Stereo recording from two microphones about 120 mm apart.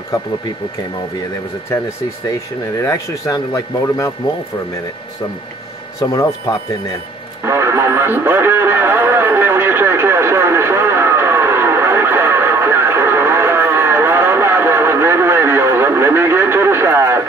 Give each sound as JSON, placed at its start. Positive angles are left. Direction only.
{"t": 2.8, "sound": "speech", "side_deg": 25}
{"t": 5.9, "sound": "speech", "side_deg": 30}
{"t": 7.4, "sound": "radio", "side_deg": -20}